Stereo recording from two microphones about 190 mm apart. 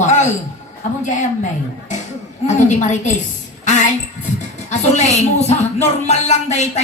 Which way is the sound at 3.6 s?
40° left (ahead or behind).